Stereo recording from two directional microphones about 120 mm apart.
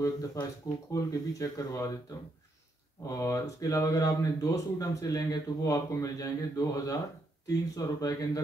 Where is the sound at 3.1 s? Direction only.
30° left (ahead or behind).